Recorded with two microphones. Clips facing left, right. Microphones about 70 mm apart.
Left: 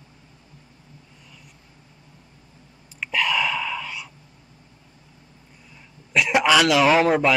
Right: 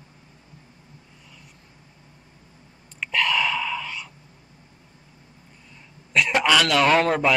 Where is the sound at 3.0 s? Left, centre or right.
Centre.